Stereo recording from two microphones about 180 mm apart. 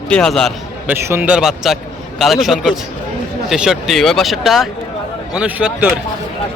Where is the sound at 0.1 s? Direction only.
5° left (ahead or behind).